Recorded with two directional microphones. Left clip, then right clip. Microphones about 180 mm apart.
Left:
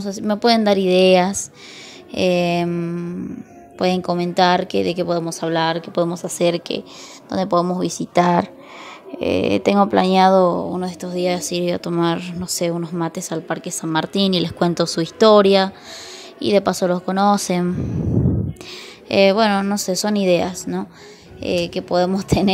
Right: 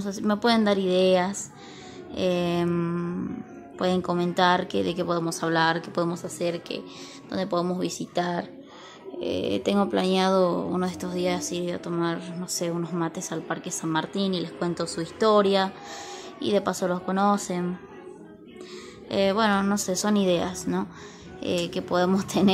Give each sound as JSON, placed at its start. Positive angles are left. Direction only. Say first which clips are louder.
{"t": 0.0, "sound": "a woman's voice", "louder": "left 6 dB", "side_deg": 20}
{"t": 2.7, "sound": "speech", "louder": "left 3 dB", "side_deg": 10}
{"t": 3.7, "sound": "a woman's voice", "louder": "left 6 dB", "side_deg": 20}
{"t": 6.2, "sound": "a woman's voice", "louder": "left 10 dB", "side_deg": 40}
{"t": 7.2, "sound": "a woman's voice", "louder": "left 8 dB", "side_deg": 25}
{"t": 9.2, "sound": "a woman's voice", "louder": "left 9 dB", "side_deg": 25}
{"t": 19.0, "sound": "a woman's voice", "louder": "left 8 dB", "side_deg": 30}